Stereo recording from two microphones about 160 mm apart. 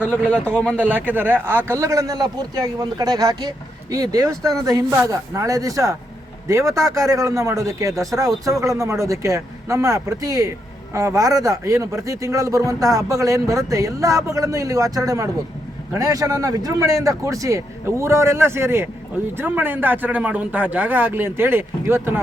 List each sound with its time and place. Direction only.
0.3 s a man's voice: 5° left (ahead or behind)
0.8 s a man's voice: 10° right (ahead or behind)